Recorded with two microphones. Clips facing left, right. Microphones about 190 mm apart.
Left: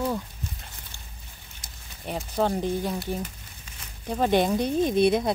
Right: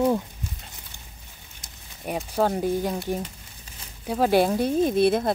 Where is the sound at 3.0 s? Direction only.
25° right (ahead or behind).